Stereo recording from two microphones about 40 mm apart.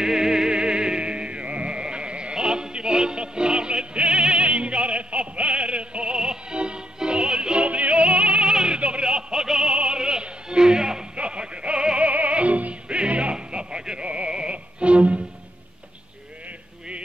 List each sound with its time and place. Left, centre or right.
0.0 s music: centre; by 8.5 s right
8.5 s opera: right
11.1 s music: right
12.1 s music: right